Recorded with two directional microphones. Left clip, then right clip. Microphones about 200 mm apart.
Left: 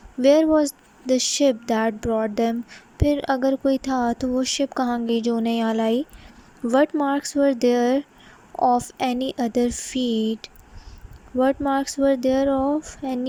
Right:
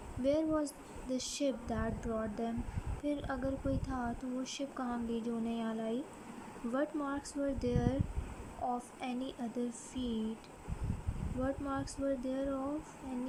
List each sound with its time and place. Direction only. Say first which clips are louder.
0.2 s speech: left 17 dB; 35° left (ahead or behind)